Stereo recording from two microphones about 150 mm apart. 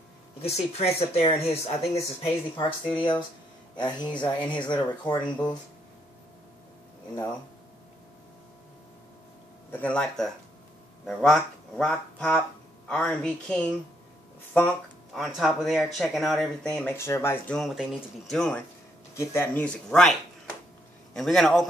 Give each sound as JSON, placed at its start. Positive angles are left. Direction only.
{"t": 0.4, "sound": "speech", "side_deg": 45}
{"t": 4.1, "sound": "speech", "side_deg": 10}
{"t": 4.6, "sound": "speech", "side_deg": 30}
{"t": 9.7, "sound": "speech", "side_deg": 10}
{"t": 17.6, "sound": "speech", "side_deg": 0}
{"t": 19.1, "sound": "speech", "side_deg": 15}